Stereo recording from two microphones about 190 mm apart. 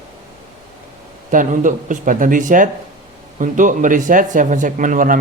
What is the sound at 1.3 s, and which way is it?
A man's voice, 45° right (ahead or behind).